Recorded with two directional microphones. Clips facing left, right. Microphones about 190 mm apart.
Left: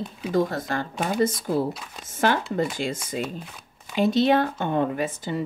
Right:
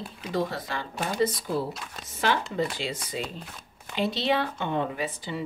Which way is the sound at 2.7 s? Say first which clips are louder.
Left 4 dB; 50° left (ahead or behind).